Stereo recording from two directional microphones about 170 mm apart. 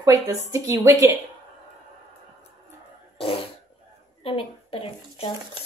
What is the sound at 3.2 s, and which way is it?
Fart, 35° left (ahead or behind).